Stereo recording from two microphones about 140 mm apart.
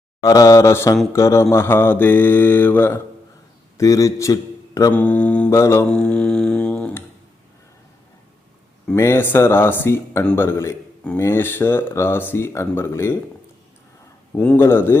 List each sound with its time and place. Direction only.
0.2 s mantra: 25° left (ahead or behind)
1.1 s a man's voice: 20° left (ahead or behind)
4.9 s speech: 10° left (ahead or behind)
5.5 s mantra: 20° left (ahead or behind)
5.9 s didgeridoo: 5° left (ahead or behind)
9.0 s speech: 15° left (ahead or behind)
14.3 s speech: 15° left (ahead or behind)